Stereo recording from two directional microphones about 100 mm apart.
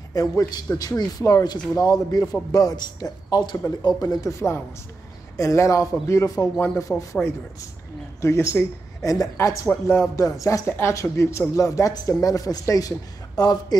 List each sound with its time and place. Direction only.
0.1 s speech: 35° left (ahead or behind)
8.2 s speech: 30° left (ahead or behind)